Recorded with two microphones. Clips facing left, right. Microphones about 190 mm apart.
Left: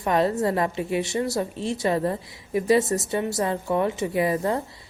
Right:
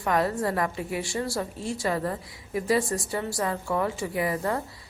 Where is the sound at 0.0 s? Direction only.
25° left (ahead or behind).